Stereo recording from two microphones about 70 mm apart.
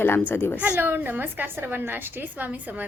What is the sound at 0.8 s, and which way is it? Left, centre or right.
A woman's voice, right.